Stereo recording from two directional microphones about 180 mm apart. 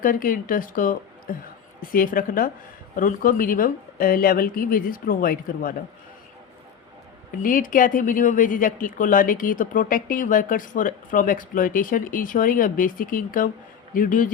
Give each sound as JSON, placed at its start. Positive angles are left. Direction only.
{"t": 0.0, "sound": "speech", "side_deg": 50}
{"t": 7.4, "sound": "speech", "side_deg": 50}